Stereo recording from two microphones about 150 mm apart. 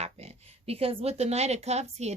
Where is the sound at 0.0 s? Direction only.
45° right (ahead or behind).